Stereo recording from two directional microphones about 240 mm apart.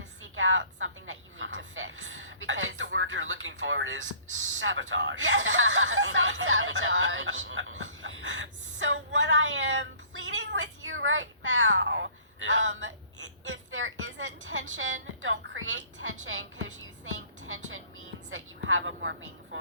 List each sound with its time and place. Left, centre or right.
0.2 s a woman's voice: right